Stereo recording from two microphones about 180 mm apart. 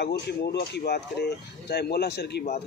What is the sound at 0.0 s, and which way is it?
A man's voice, 65° left (ahead or behind).